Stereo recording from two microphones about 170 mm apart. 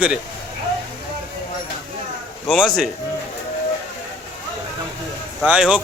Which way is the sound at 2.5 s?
Centre (ahead or behind).